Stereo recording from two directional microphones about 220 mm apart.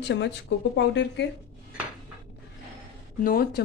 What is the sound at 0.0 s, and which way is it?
A woman's voice, 55° left (ahead or behind).